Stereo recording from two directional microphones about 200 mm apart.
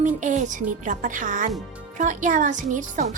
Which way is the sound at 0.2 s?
40° right (ahead or behind).